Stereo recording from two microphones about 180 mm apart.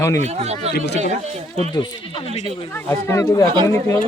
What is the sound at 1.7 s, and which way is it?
Speech, 25° left (ahead or behind).